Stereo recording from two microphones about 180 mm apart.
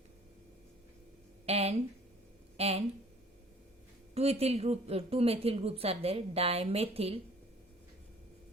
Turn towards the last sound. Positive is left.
turn(degrees=-35)  # may be behind; listen again after turning